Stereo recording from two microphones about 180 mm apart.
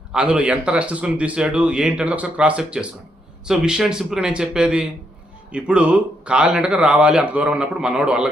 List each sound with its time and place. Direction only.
0.1 s a man's voice: 5° right (ahead or behind)